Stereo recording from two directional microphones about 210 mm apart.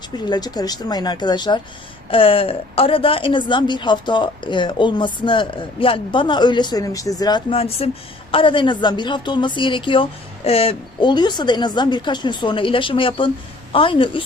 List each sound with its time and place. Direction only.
0.3 s a woman's voice: 20° left (ahead or behind)